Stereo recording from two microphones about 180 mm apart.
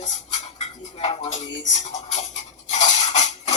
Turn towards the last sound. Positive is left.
turn(degrees=40)  # may be behind; listen again after turning